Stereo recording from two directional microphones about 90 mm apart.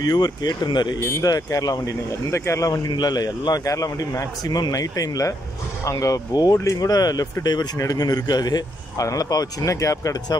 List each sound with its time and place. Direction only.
0.0 s a man's voice: 50° left (ahead or behind)
0.9 s speech: 30° left (ahead or behind)
1.3 s a man's voice: 45° left (ahead or behind)